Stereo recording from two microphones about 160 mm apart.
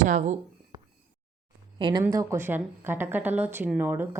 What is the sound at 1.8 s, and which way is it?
Speech, 30° right (ahead or behind).